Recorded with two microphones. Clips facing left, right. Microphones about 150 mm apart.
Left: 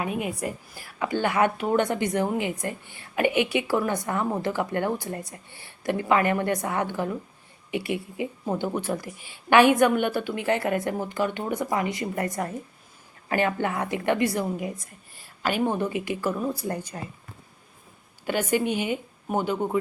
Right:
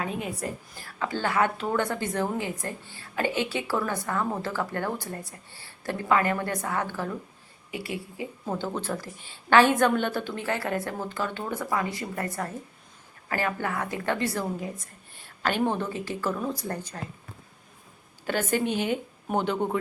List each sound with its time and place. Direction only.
0.0 s a woman's voice: 10° left (ahead or behind)
18.3 s a woman's voice: 15° left (ahead or behind)